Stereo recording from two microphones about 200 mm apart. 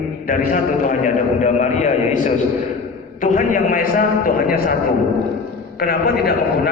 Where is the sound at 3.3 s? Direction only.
40° left (ahead or behind).